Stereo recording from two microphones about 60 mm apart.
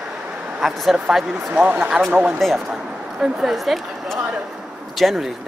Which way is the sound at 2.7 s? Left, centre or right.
Centre.